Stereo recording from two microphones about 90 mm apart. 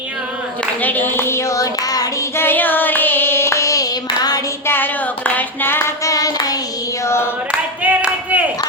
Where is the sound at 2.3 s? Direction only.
25° left (ahead or behind); by 4.5 s 45° left (ahead or behind).